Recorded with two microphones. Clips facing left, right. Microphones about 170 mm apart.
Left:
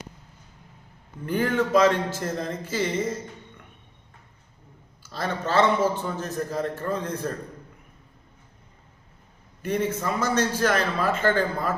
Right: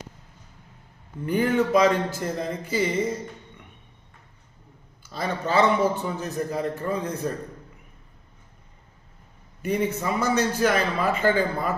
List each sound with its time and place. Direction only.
1.2 s a man's voice: 10° right (ahead or behind)
1.5 s a man's voice: centre (ahead or behind)
2.2 s a man's voice: 10° right (ahead or behind)
5.1 s a man's voice: centre (ahead or behind)
5.8 s a man's voice: 15° right (ahead or behind)
9.6 s a man's voice: 10° right (ahead or behind)